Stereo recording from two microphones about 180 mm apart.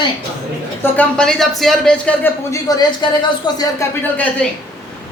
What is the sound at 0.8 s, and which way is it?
Speech, 10° left (ahead or behind).